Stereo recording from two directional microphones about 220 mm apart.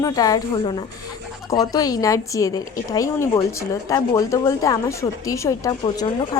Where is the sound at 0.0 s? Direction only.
15° left (ahead or behind).